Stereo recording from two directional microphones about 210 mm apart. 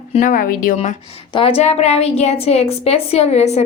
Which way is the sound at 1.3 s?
25° left (ahead or behind).